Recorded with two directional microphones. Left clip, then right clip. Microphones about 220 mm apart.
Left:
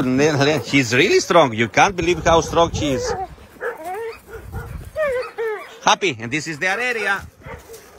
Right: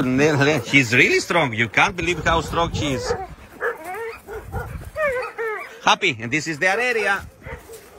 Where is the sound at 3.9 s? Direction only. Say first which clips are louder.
Left 2 dB; 50° left (ahead or behind).